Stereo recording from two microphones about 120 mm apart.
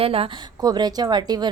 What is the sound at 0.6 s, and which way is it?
Speech, 35° right (ahead or behind).